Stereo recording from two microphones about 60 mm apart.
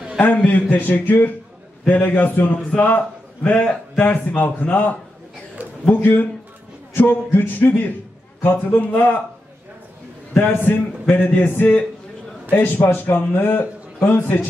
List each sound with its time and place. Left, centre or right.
0.5 s a man's voice: left
10.3 s a man's voice: left